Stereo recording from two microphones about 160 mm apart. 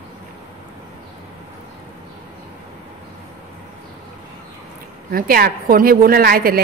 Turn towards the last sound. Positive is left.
turn(degrees=-70)  # may be behind; listen again after turning